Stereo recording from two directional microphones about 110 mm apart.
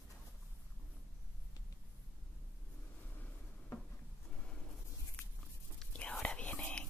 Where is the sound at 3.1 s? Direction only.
15° left (ahead or behind).